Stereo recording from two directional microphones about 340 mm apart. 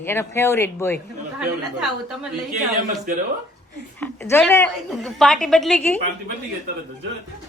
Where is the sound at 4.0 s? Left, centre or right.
Centre.